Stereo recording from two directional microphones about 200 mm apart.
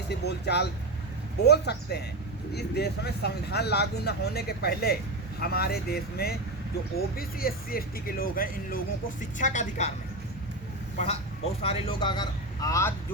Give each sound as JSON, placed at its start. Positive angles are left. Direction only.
{"t": 0.1, "sound": "a woman's voice", "side_deg": 55}
{"t": 10.9, "sound": "a man's voice", "side_deg": 30}